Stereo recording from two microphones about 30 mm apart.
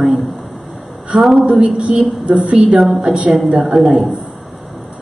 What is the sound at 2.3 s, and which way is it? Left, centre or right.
Speech, right.